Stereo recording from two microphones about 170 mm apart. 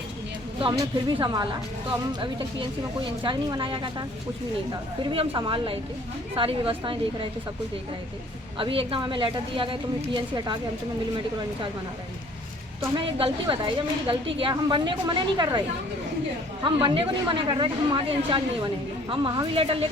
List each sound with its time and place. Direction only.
0.6 s speech: 25° right (ahead or behind)
5.1 s a woman's voice: 30° right (ahead or behind)
8.5 s speech: 30° right (ahead or behind)
13.1 s speech: 30° right (ahead or behind)
16.6 s a woman's voice: 30° right (ahead or behind)